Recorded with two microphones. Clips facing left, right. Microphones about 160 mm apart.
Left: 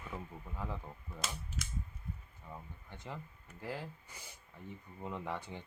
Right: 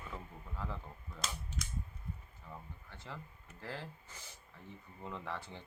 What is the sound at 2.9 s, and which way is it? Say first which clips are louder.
Speech: left 3 dB; 20° left (ahead or behind).